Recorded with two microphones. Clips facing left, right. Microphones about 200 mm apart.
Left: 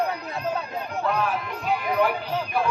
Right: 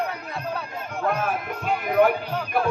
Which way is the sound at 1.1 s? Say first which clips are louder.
Even; 50° right (ahead or behind).